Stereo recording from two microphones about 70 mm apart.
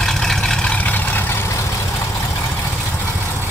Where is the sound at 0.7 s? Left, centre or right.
Left.